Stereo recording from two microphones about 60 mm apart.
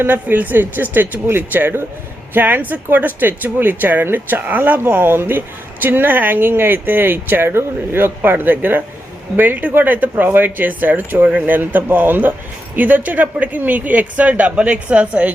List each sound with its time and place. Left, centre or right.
0.0 s speech: right